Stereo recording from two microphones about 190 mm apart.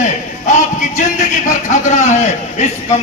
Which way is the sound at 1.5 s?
40° left (ahead or behind).